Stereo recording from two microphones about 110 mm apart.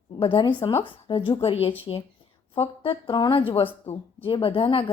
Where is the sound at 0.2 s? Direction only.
50° left (ahead or behind).